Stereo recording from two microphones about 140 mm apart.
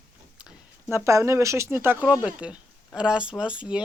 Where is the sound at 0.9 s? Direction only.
20° right (ahead or behind).